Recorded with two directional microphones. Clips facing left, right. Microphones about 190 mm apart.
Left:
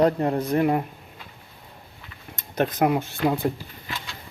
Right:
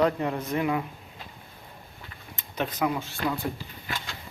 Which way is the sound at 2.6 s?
50° left (ahead or behind).